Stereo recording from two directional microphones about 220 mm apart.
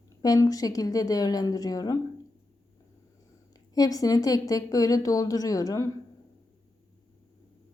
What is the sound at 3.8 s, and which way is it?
A woman's voice, 15° left (ahead or behind).